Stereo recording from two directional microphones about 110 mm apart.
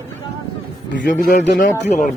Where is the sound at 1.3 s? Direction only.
90° left.